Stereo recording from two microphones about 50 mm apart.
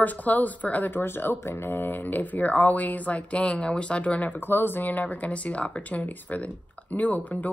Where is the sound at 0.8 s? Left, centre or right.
Left.